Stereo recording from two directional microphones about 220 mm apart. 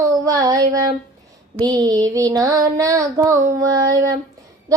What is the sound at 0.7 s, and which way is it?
Child singing, 15° right (ahead or behind).